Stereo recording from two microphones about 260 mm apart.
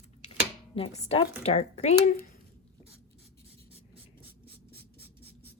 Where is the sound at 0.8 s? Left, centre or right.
Left.